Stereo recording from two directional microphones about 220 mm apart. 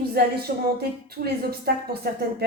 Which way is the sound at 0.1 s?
45° right (ahead or behind).